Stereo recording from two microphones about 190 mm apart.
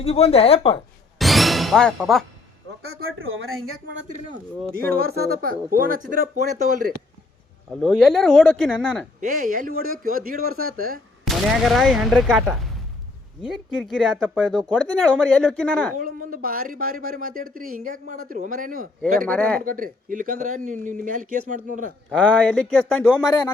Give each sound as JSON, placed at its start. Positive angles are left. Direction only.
{"t": 0.0, "sound": "speech", "side_deg": 30}
{"t": 1.2, "sound": "music", "side_deg": 0}
{"t": 2.9, "sound": "speech", "side_deg": -90}
{"t": 4.8, "sound": "speech", "side_deg": -50}
{"t": 7.8, "sound": "speech", "side_deg": 0}
{"t": 9.2, "sound": "speech", "side_deg": -45}
{"t": 11.3, "sound": "speech", "side_deg": 0}
{"t": 16.0, "sound": "speech", "side_deg": -45}
{"t": 19.3, "sound": "speech", "side_deg": 5}
{"t": 19.6, "sound": "speech", "side_deg": -45}
{"t": 22.1, "sound": "speech", "side_deg": 5}